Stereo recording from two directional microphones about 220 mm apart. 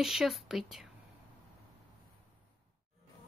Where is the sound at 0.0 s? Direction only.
Centre (ahead or behind).